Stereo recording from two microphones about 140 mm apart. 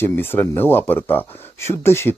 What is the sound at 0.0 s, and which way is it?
Speech, 15° left (ahead or behind).